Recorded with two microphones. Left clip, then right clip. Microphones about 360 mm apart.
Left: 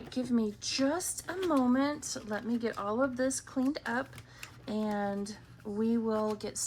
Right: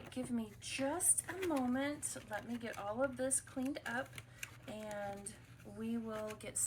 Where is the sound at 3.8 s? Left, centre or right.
Centre.